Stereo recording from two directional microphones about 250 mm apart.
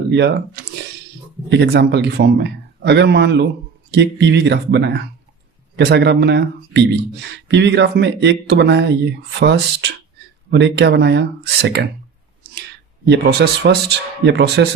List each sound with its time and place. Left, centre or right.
0.1 s speech: right
13.1 s speech: right